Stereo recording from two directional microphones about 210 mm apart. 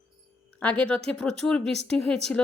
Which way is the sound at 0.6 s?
5° left (ahead or behind).